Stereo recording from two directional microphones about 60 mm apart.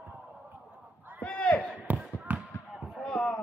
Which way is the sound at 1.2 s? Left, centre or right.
Centre.